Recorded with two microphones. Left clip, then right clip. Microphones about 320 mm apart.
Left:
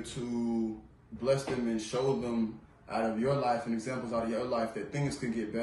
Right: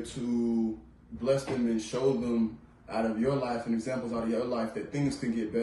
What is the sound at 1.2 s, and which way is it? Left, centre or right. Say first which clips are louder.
A man's voice: right 2 dB; centre.